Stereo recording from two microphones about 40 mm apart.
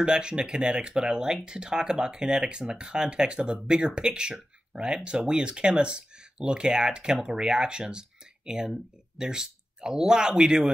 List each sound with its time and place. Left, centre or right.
0.0 s speech: right